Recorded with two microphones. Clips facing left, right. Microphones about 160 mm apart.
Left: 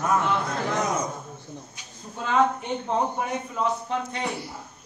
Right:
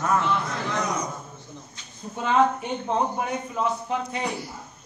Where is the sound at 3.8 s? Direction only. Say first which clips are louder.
Right 1 dB; 5° right (ahead or behind).